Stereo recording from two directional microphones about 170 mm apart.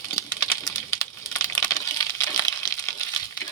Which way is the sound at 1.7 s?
20° left (ahead or behind).